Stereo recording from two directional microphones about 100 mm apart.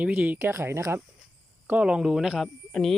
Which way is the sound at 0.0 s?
15° right (ahead or behind).